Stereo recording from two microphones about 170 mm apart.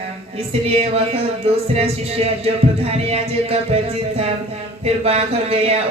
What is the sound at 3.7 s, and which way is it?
Music, 40° right (ahead or behind).